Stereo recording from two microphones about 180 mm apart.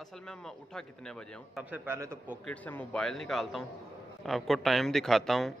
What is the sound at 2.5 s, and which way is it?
A man's voice, 5° left (ahead or behind).